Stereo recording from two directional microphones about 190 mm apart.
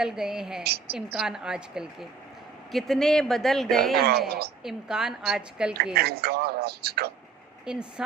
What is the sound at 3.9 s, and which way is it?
Speech, 55° right (ahead or behind).